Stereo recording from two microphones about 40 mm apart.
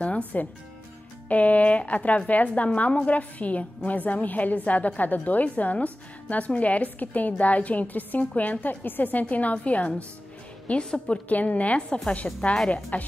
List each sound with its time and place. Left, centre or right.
0.3 s a woman's voice: left